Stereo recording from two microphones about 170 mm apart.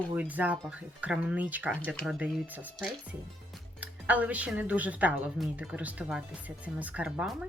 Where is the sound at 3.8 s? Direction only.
10° right (ahead or behind).